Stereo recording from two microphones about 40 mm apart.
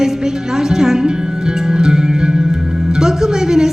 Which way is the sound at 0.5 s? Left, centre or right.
Centre.